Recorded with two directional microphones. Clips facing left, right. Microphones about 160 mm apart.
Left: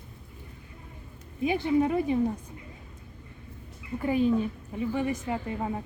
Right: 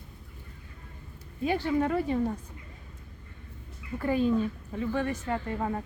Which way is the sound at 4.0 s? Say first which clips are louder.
Left 1 dB; 15° left (ahead or behind).